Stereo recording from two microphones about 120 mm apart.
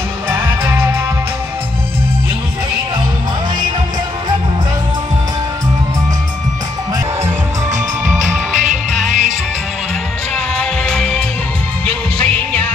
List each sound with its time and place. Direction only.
0.3 s music: 20° right (ahead or behind)
8.6 s music: 90° right
10.3 s music: 5° left (ahead or behind)